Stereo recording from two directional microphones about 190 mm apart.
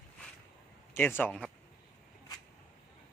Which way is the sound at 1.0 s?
10° left (ahead or behind).